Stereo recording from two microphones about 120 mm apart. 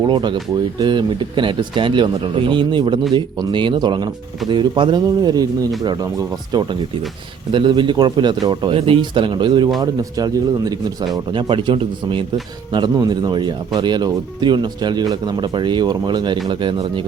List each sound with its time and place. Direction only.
0.0 s speech: 40° right (ahead or behind)
11.1 s speech: 45° right (ahead or behind)